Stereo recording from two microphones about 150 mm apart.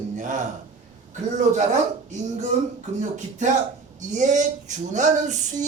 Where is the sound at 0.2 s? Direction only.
55° right (ahead or behind).